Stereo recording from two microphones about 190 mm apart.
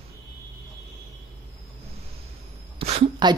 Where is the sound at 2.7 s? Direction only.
30° right (ahead or behind).